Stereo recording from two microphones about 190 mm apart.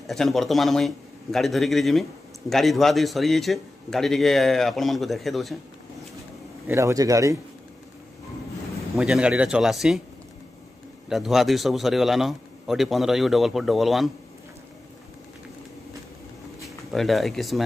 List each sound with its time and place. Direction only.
0.0 s a man's voice: centre (ahead or behind)
6.7 s a man's voice: 15° right (ahead or behind)
8.9 s a man's voice: 5° right (ahead or behind)
11.1 s a man's voice: centre (ahead or behind)
16.6 s speech: centre (ahead or behind)